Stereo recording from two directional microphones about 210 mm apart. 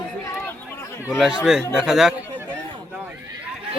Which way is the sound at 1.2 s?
5° right (ahead or behind).